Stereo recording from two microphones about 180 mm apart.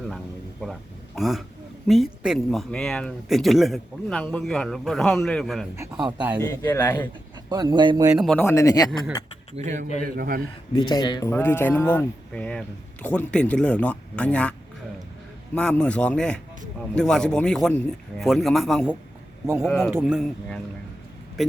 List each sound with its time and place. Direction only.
0.6 s a sound: centre (ahead or behind)
1.9 s speech: centre (ahead or behind)
6.1 s speech: 10° right (ahead or behind)
6.4 s speech: 10° left (ahead or behind)
7.5 s speech: 25° right (ahead or behind)
8.1 s speech: centre (ahead or behind)
8.4 s speech: 20° left (ahead or behind)
9.6 s a man's voice: 40° right (ahead or behind)
10.0 s a man's voice: 50° right (ahead or behind)
10.8 s speech: 25° left (ahead or behind); by 14.5 s 5° left (ahead or behind)
15.5 s speech: 5° left (ahead or behind)
19.6 s speech: 10° left (ahead or behind)
20.0 s speech: centre (ahead or behind)